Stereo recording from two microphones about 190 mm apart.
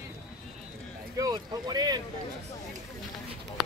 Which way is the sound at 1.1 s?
20° right (ahead or behind).